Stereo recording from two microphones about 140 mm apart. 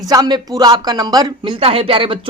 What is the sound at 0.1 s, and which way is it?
Speech, 30° right (ahead or behind).